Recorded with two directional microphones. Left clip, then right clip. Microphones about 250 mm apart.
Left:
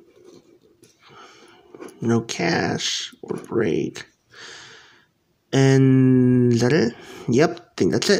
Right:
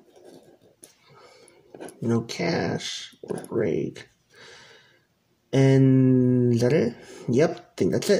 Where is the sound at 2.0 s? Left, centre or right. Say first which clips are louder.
Left 4 dB; left.